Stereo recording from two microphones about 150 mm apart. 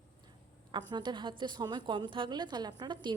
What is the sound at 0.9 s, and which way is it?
A woman's voice, 30° right (ahead or behind).